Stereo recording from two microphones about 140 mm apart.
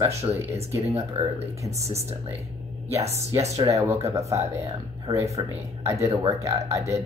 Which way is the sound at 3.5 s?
25° right (ahead or behind).